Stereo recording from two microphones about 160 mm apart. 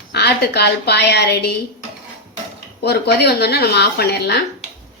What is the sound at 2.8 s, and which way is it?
Speech, 90° left.